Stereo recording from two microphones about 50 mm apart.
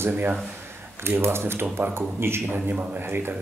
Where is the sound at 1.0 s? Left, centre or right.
Right.